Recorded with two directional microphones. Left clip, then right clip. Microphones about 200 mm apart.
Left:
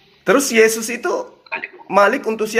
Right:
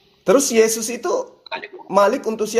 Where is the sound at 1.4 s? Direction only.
45° right (ahead or behind).